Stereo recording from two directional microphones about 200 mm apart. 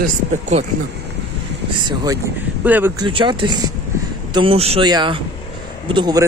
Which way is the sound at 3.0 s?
25° right (ahead or behind).